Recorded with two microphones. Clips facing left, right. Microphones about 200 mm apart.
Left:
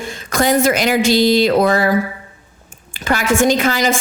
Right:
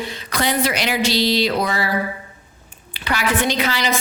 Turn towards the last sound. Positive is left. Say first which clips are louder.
# left 6 dB
turn(degrees=50)  # may be behind; listen again after turning